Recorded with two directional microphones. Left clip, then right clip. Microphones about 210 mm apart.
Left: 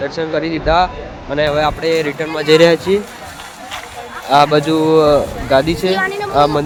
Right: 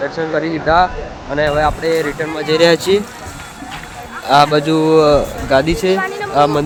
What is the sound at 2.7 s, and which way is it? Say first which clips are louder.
Speech: right 1 dB; 10° right (ahead or behind).